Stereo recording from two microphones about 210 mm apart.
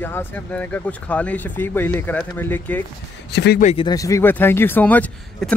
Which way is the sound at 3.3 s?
55° left (ahead or behind).